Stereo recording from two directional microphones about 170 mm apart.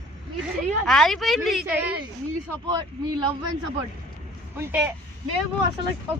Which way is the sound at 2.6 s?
25° right (ahead or behind).